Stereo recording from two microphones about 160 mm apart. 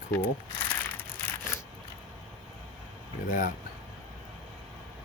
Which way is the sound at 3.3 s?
55° left (ahead or behind).